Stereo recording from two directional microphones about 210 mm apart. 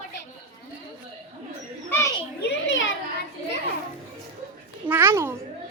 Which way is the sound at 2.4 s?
60° left (ahead or behind).